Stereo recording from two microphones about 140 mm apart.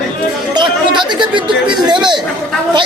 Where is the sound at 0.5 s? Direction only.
30° right (ahead or behind).